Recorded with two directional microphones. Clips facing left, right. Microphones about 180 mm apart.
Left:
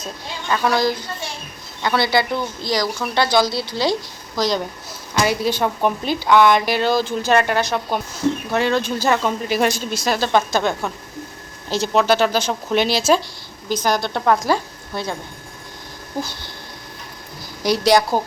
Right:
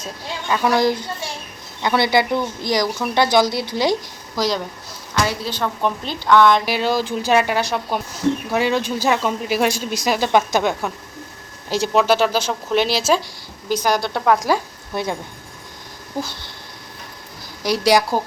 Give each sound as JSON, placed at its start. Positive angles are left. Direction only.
{"t": 0.4, "sound": "speech", "side_deg": -15}
{"t": 4.4, "sound": "speech", "side_deg": -5}
{"t": 5.1, "sound": "speech", "side_deg": 15}
{"t": 6.7, "sound": "speech", "side_deg": -5}
{"t": 17.6, "sound": "speech", "side_deg": -5}